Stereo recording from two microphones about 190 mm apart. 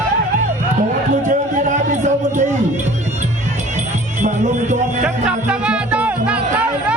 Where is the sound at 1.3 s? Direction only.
40° right (ahead or behind).